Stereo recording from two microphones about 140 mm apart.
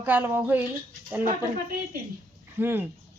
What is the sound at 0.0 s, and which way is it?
Speech, 15° right (ahead or behind).